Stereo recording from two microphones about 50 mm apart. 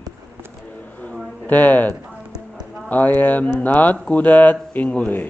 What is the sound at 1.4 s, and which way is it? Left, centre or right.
Speech, left.